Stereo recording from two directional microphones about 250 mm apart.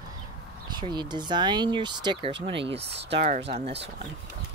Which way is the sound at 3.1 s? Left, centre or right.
Right.